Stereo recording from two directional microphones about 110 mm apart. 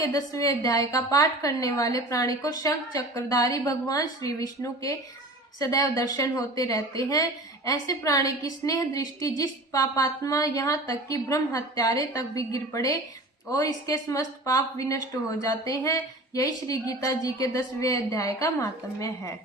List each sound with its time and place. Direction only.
0.0 s speech: 35° left (ahead or behind)